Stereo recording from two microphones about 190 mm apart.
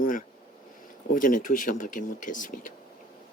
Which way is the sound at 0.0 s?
45° left (ahead or behind).